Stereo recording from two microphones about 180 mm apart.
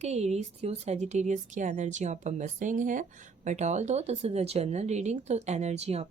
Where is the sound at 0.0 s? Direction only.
35° right (ahead or behind).